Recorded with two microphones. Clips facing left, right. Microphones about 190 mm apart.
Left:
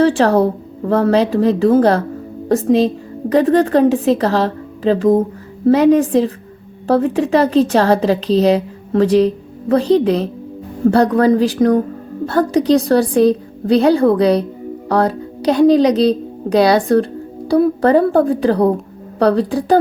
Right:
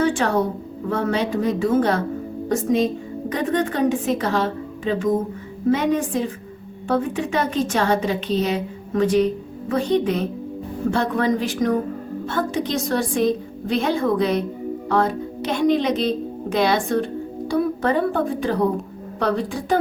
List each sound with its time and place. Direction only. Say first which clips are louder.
0.0 s a woman's voice: left 7 dB; 35° left (ahead or behind)